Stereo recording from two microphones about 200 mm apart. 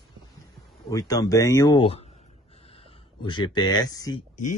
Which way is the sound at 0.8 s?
15° left (ahead or behind).